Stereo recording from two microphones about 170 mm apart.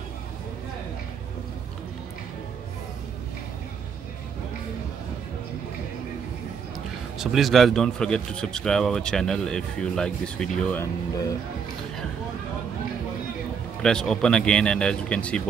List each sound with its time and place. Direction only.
7.2 s speech: centre (ahead or behind)
10.8 s speech: 20° left (ahead or behind)
13.8 s speech: 5° left (ahead or behind)